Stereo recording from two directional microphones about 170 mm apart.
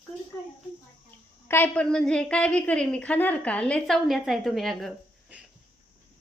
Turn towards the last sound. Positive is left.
turn(degrees=0)  # may be behind; listen again after turning